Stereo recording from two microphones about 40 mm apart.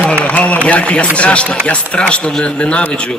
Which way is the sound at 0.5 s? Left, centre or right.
Left.